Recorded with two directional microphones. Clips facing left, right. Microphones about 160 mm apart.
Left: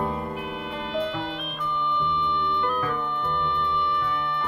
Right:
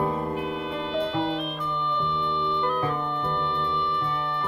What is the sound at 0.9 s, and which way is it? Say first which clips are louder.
Music: right 3 dB; 30° right (ahead or behind).